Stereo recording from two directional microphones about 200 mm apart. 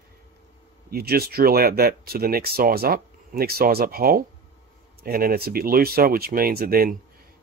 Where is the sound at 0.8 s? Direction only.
50° right (ahead or behind).